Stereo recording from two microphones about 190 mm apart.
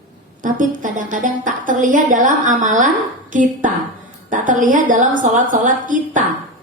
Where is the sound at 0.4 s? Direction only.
40° right (ahead or behind).